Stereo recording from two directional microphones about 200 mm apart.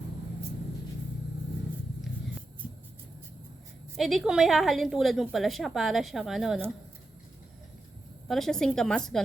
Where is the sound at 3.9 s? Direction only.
Centre (ahead or behind).